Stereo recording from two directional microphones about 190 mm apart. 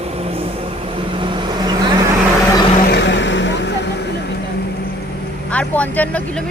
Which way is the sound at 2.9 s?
70° left (ahead or behind).